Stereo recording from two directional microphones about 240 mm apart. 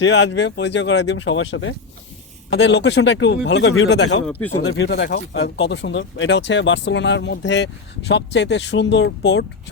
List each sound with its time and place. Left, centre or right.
0.0 s speech: left